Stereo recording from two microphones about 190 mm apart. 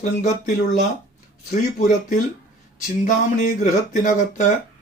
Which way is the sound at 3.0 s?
40° left (ahead or behind).